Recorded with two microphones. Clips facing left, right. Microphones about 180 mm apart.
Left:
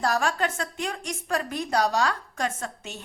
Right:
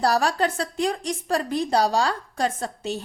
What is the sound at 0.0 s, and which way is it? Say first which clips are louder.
A woman's voice: right 4 dB; 35° right (ahead or behind).